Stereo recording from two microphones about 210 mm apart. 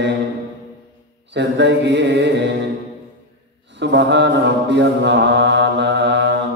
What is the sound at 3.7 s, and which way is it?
Mantra, 55° right (ahead or behind).